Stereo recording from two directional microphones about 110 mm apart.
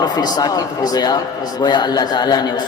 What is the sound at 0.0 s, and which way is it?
A man's voice, 35° left (ahead or behind).